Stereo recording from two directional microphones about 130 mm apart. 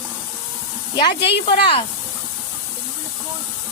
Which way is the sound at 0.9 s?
35° left (ahead or behind).